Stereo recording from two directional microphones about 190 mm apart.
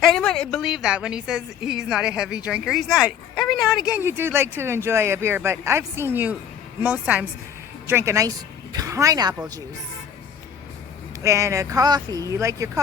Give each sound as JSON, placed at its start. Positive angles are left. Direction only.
{"t": 0.0, "sound": "a woman's voice", "side_deg": 0}
{"t": 11.2, "sound": "speech", "side_deg": -15}